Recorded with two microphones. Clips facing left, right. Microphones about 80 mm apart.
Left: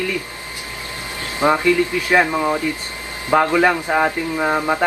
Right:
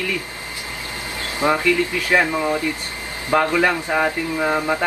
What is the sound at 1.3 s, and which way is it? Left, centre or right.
Speech, left.